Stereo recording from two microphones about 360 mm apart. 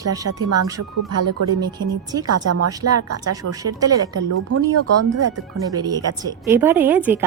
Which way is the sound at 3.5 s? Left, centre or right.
Centre.